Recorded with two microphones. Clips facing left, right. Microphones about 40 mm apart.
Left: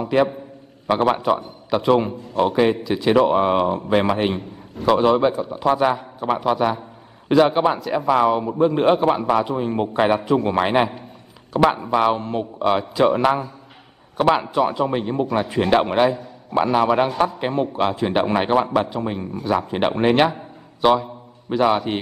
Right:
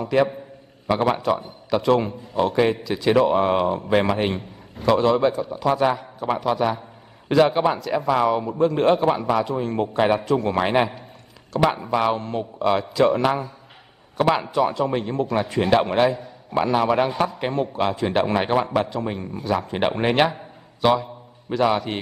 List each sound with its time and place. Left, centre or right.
0.0 s a man's voice: centre
0.8 s a man's voice: left; by 20.3 s centre
20.8 s a man's voice: centre